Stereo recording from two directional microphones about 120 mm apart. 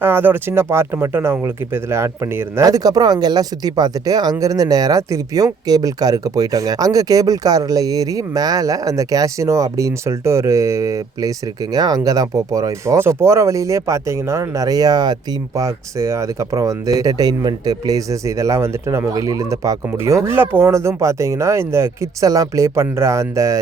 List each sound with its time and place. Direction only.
0.0 s speech: 15° right (ahead or behind)